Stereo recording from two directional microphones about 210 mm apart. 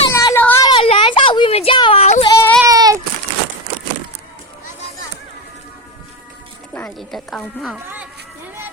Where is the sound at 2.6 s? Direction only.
15° right (ahead or behind).